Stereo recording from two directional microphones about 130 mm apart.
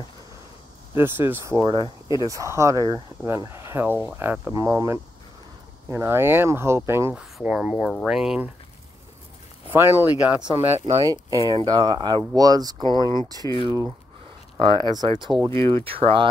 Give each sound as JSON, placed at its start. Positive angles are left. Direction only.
{"t": 0.9, "sound": "speech", "side_deg": -20}
{"t": 7.2, "sound": "speech", "side_deg": -5}
{"t": 9.7, "sound": "speech", "side_deg": -15}
{"t": 14.6, "sound": "speech", "side_deg": -35}